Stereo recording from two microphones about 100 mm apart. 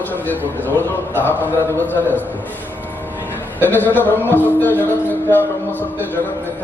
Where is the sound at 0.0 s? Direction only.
20° left (ahead or behind).